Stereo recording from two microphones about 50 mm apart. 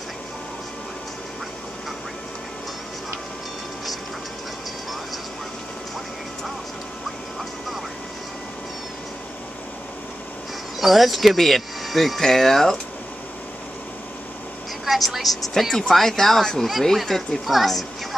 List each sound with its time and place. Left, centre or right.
10.8 s speech: centre
14.9 s speech: centre